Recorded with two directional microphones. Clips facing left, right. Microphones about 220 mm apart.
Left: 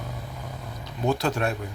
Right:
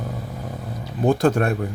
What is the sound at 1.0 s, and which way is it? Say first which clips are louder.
Speech: right 7 dB; 50° right (ahead or behind).